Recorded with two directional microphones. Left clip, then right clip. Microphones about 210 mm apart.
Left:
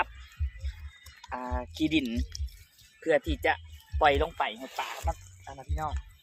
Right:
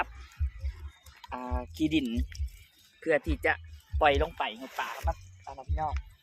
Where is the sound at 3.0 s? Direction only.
15° left (ahead or behind); by 5.9 s 35° left (ahead or behind).